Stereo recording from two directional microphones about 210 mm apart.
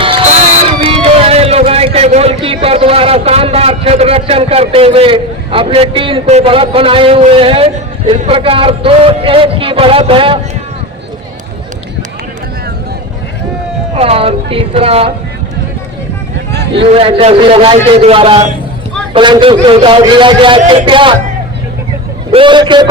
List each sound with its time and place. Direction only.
0.6 s a sound: 25° right (ahead or behind)
2.4 s a man's voice: 25° right (ahead or behind)
13.9 s a man's voice: 30° right (ahead or behind)
16.5 s vehicle: 50° right (ahead or behind)
16.8 s a man's voice: 25° right (ahead or behind)
22.3 s a man's voice: 25° right (ahead or behind)